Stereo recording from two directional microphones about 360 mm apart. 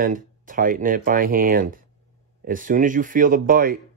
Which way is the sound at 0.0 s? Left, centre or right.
Right.